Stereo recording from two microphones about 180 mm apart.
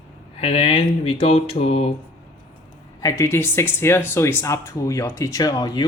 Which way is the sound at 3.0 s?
20° left (ahead or behind).